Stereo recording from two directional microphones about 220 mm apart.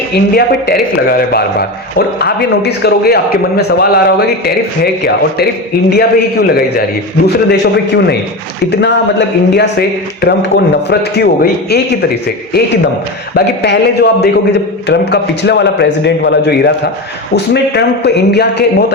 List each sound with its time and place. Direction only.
0.1 s a man's voice: 45° left (ahead or behind)
13.3 s a man's voice: 50° left (ahead or behind)